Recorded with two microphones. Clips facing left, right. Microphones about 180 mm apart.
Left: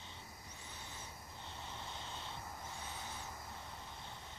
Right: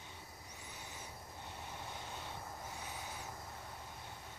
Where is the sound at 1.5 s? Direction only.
10° right (ahead or behind).